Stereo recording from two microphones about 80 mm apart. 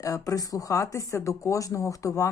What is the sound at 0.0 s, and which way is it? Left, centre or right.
Speech, left.